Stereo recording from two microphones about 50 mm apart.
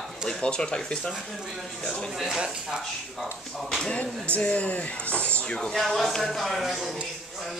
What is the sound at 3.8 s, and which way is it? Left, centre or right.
Speech, left.